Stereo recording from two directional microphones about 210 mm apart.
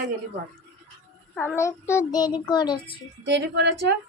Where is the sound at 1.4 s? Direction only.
10° left (ahead or behind).